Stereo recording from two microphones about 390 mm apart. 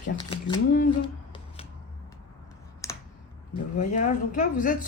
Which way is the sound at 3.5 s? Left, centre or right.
Centre.